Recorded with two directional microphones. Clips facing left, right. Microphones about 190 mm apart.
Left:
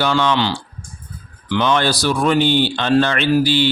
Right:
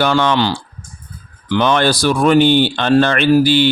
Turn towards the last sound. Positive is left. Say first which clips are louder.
# right 4 dB
turn(degrees=-55)  # may be behind; listen again after turning